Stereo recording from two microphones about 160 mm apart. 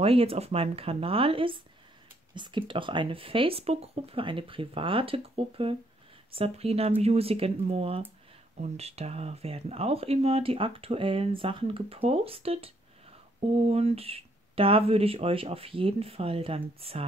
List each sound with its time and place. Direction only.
0.0 s speech: 35° right (ahead or behind)